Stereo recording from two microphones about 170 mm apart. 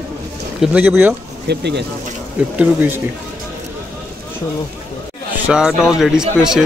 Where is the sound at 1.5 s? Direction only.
85° right.